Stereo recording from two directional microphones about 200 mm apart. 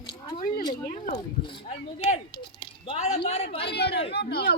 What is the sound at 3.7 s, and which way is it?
Chatter, 55° left (ahead or behind).